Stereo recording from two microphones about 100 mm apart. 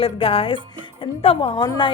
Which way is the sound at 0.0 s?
70° left (ahead or behind).